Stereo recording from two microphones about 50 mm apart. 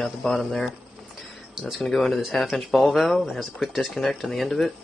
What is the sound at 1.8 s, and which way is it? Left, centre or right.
Speech, centre.